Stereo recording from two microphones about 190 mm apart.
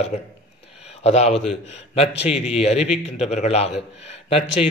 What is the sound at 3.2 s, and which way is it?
Speech, 35° left (ahead or behind).